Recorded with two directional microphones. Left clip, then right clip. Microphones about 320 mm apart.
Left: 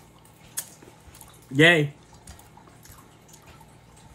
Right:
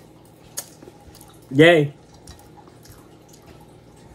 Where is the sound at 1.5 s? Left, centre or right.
Centre.